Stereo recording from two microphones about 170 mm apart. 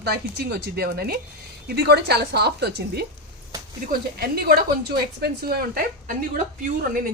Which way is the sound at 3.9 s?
65° right (ahead or behind).